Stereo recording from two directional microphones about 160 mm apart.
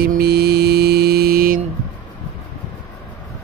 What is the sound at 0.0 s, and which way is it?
Music, 75° right (ahead or behind).